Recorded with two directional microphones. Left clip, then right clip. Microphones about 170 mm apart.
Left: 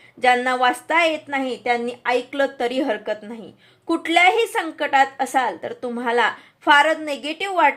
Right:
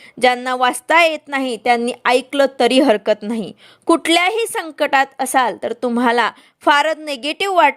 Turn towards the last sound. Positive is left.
turn(degrees=-50)  # may be behind; listen again after turning